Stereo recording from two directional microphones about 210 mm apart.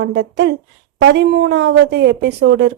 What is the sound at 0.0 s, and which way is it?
A woman's voice, 55° right (ahead or behind).